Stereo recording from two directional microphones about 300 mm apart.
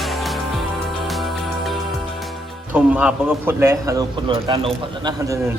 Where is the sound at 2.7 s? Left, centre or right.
Centre.